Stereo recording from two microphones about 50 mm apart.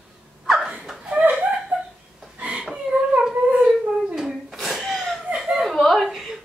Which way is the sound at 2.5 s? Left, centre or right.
Centre.